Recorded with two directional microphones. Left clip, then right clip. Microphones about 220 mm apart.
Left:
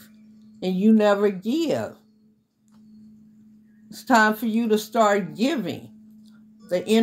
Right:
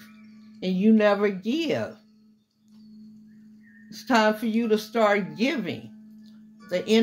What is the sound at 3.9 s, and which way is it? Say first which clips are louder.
Speech: left 3 dB; 45° left (ahead or behind).